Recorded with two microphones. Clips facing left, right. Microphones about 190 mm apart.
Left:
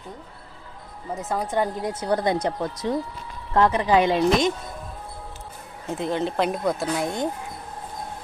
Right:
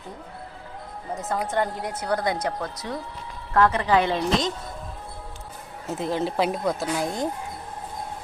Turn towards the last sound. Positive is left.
turn(degrees=0)  # may be behind; listen again after turning